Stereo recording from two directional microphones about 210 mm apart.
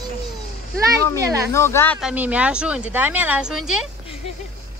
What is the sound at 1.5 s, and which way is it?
Speech, 10° left (ahead or behind).